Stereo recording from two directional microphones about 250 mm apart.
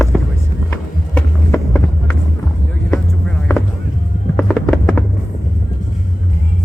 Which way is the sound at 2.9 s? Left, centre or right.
Centre.